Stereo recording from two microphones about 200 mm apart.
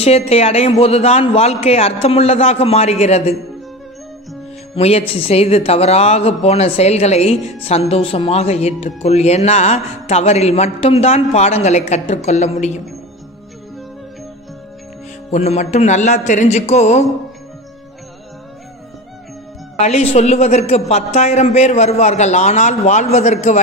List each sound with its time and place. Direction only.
0.0 s speech: 30° left (ahead or behind)
4.7 s speech: 30° left (ahead or behind)
15.3 s speech: 35° left (ahead or behind)
19.8 s speech: 30° left (ahead or behind)